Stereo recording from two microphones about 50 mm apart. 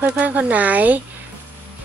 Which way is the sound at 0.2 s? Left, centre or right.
Right.